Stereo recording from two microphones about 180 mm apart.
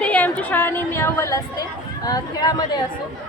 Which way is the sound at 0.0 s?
10° left (ahead or behind).